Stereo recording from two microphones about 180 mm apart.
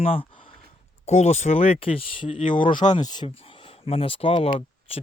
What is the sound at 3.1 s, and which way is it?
Speech, 25° left (ahead or behind).